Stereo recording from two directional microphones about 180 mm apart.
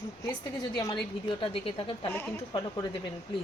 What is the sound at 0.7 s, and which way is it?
A woman's voice, 25° left (ahead or behind).